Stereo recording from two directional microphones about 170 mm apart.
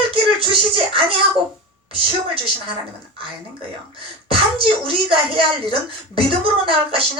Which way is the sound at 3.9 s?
30° right (ahead or behind).